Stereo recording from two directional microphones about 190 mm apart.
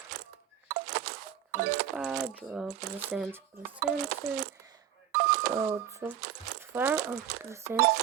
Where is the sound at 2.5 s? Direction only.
5° right (ahead or behind).